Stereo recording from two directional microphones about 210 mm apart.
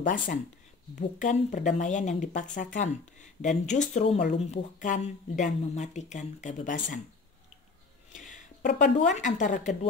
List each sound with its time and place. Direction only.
0.0 s speech: 40° left (ahead or behind)
8.1 s a sound: 40° left (ahead or behind)
9.0 s speech: 35° left (ahead or behind)